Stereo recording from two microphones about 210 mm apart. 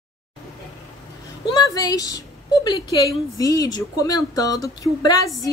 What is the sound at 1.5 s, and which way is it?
A woman's voice, 20° left (ahead or behind).